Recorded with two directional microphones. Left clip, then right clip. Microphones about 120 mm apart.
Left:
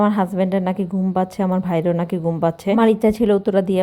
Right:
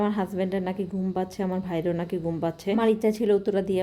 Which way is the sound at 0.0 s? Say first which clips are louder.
Left 8 dB; 40° left (ahead or behind).